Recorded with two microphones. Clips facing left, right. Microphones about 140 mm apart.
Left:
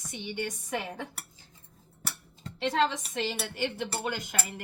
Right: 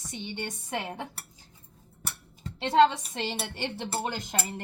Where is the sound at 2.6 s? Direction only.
30° right (ahead or behind).